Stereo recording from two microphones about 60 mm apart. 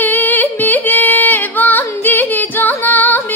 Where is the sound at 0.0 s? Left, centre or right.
Left.